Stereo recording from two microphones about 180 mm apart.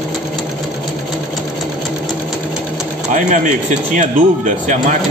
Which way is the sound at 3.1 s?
40° right (ahead or behind).